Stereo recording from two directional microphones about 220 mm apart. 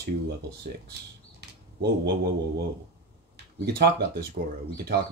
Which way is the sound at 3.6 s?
45° right (ahead or behind).